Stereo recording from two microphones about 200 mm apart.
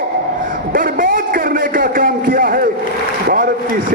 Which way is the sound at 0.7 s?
45° right (ahead or behind).